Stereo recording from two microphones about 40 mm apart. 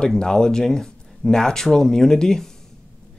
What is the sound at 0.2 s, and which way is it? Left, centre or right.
Speech, centre.